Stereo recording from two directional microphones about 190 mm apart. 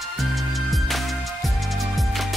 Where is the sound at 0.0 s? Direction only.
Centre (ahead or behind).